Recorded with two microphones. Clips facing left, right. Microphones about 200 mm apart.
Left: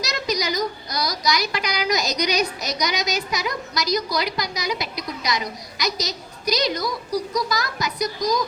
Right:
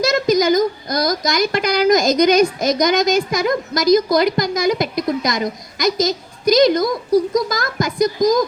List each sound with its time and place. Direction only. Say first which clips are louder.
0.0 s a woman's voice: right 10 dB; 50° right (ahead or behind)